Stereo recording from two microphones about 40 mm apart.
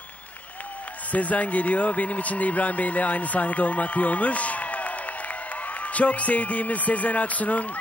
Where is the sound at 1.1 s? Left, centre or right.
Left.